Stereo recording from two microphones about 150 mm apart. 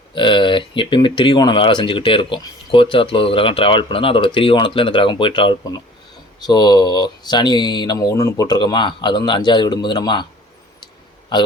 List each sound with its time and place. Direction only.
0.1 s speech: 30° left (ahead or behind)